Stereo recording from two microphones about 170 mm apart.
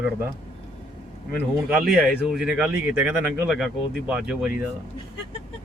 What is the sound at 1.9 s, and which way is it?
Speech, centre (ahead or behind).